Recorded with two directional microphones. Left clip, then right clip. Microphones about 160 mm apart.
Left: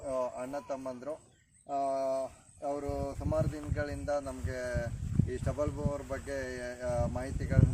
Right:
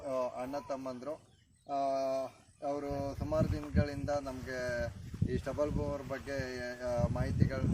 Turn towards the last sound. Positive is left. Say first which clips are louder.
# even
turn(degrees=15)  # may be behind; listen again after turning